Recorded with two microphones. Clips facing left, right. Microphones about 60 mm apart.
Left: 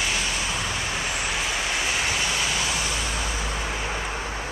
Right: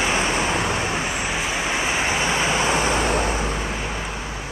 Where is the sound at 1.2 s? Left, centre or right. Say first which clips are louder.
Right 3 dB; centre; by 3.4 s right.